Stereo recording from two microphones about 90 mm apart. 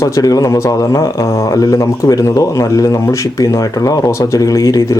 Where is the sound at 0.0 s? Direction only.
40° left (ahead or behind).